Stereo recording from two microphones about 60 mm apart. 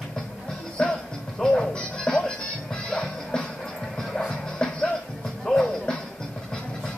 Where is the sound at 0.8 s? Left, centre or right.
Centre.